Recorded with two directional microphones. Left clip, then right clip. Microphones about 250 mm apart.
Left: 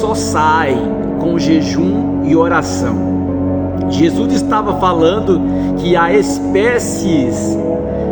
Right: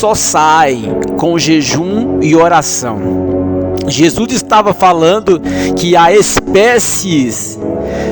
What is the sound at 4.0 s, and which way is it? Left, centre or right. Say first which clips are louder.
Speech: right 2 dB; right.